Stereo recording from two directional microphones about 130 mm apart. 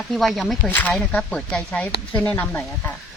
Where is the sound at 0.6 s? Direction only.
10° left (ahead or behind).